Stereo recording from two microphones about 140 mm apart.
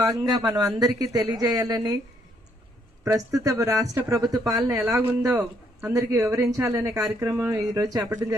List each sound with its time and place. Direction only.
0.0 s speech: 25° right (ahead or behind)
3.0 s speech: 20° right (ahead or behind)